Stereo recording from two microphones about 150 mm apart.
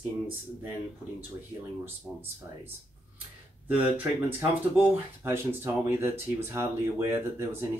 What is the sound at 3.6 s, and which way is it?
Speech, 10° right (ahead or behind).